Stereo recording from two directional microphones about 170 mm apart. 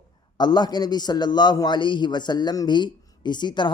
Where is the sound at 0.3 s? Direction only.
25° left (ahead or behind).